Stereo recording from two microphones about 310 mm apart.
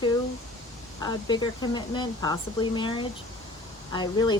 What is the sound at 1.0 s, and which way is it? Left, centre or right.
Speech, centre.